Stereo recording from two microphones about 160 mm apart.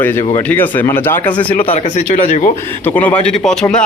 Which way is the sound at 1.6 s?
40° left (ahead or behind).